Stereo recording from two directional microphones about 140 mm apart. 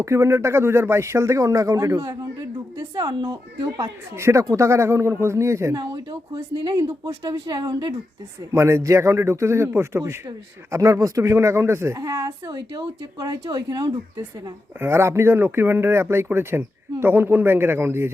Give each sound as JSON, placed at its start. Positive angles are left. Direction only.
{"t": 0.0, "sound": "a man's voice", "side_deg": -20}
{"t": 8.5, "sound": "a man's voice", "side_deg": -20}
{"t": 14.8, "sound": "speech", "side_deg": -15}